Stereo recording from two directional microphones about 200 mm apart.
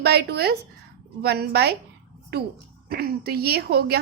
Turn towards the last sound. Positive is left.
turn(degrees=-50)  # may be behind; listen again after turning